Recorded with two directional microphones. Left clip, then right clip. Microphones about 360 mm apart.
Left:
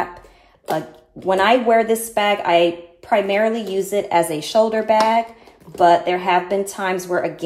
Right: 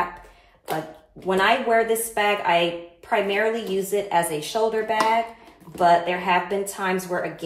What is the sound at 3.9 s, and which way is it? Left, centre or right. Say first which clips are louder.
Speech: left 5 dB; left.